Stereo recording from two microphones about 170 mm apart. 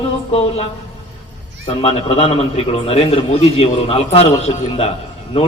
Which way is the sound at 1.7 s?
35° left (ahead or behind).